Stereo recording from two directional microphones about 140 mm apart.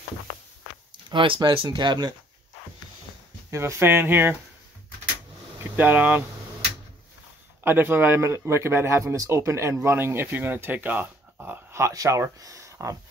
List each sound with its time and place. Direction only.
1.1 s speech: 35° right (ahead or behind)
3.4 s speech: 20° right (ahead or behind)
5.6 s speech: 10° right (ahead or behind)
7.6 s speech: 15° right (ahead or behind)